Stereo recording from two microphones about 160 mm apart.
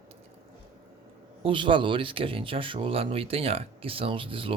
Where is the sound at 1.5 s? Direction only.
30° right (ahead or behind).